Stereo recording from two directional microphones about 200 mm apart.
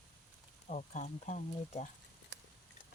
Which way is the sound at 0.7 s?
35° left (ahead or behind).